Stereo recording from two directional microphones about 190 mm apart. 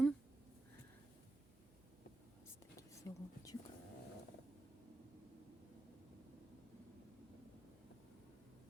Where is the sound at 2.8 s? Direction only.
20° left (ahead or behind).